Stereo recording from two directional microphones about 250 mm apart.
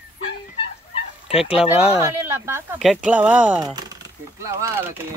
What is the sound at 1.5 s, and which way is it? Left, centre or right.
Speech, centre.